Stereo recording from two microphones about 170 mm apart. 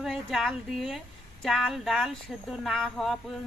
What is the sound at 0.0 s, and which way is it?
A woman's voice, centre (ahead or behind).